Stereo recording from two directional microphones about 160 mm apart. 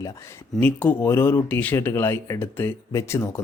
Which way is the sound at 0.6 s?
10° left (ahead or behind).